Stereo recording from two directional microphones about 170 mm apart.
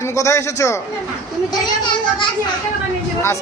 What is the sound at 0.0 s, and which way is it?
A man's voice, 15° left (ahead or behind).